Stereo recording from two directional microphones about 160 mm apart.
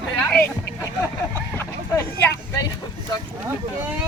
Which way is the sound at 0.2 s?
15° left (ahead or behind).